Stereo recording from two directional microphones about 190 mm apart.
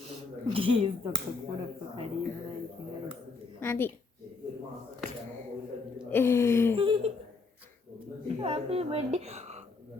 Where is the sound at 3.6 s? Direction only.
10° left (ahead or behind).